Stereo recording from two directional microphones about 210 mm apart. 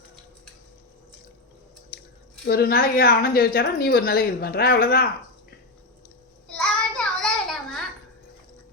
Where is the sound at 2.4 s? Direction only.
45° left (ahead or behind).